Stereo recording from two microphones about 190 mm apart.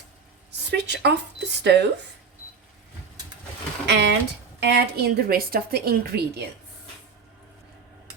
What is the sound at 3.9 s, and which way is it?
A woman's voice, 65° right (ahead or behind).